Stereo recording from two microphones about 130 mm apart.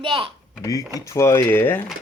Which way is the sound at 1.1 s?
25° left (ahead or behind).